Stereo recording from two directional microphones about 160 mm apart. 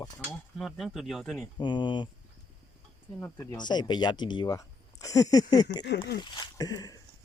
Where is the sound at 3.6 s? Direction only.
25° left (ahead or behind).